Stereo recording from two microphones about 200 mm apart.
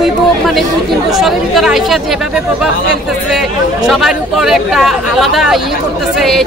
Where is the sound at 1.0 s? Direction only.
Centre (ahead or behind).